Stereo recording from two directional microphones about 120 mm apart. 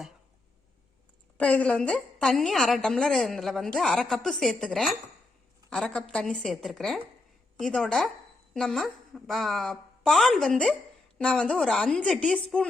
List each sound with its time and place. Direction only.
1.4 s a woman's voice: 10° left (ahead or behind)